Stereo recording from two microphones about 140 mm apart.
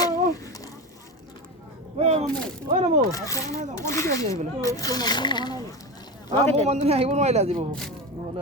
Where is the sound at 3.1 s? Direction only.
25° left (ahead or behind).